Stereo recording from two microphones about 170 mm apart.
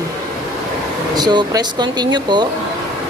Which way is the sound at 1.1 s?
25° right (ahead or behind).